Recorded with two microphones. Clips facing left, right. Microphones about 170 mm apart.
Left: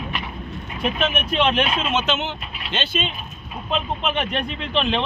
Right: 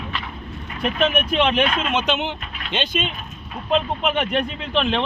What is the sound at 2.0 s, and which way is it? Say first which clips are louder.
Speech: right 1 dB; 15° right (ahead or behind).